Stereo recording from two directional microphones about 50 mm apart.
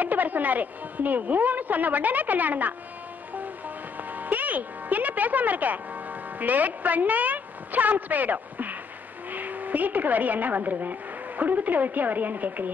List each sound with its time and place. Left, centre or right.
0.0 s a woman's voice: right
3.3 s music: right
6.4 s a woman's voice: right